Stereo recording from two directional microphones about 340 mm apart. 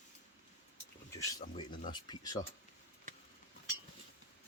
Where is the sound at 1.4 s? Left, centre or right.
Centre.